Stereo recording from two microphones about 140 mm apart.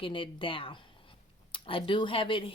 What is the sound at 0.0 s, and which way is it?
Speech, 40° left (ahead or behind).